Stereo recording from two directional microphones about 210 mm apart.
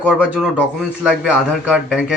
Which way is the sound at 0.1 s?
5° right (ahead or behind).